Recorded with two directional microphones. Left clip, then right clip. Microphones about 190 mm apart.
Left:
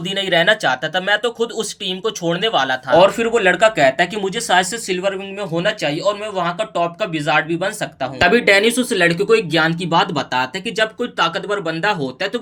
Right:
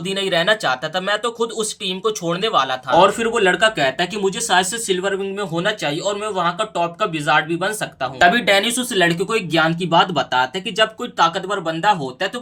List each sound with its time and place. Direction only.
0.1 s speech: 10° left (ahead or behind)